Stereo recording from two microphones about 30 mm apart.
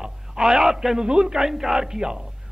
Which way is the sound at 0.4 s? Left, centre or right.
Centre.